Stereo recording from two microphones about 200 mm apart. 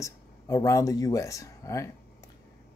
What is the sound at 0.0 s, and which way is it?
Speech, 15° left (ahead or behind).